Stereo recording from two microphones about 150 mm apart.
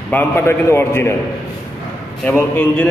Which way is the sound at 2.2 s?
10° left (ahead or behind).